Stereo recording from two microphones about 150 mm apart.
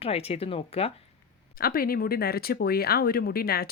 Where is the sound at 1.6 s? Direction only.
80° left.